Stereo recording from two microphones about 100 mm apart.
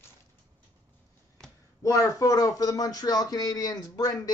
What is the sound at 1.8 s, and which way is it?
Speech, 35° left (ahead or behind).